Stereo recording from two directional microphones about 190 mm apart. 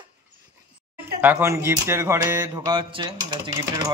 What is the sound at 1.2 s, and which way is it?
Speech, 10° right (ahead or behind).